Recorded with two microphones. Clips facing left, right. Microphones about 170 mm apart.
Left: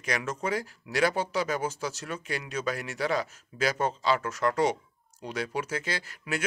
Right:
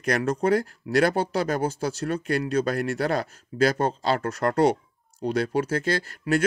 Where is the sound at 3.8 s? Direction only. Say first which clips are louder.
Right 3 dB; 55° right (ahead or behind).